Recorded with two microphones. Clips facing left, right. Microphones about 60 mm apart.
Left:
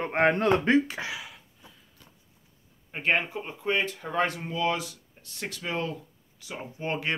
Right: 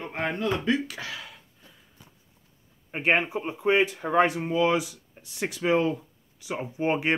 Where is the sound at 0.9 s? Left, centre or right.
Centre.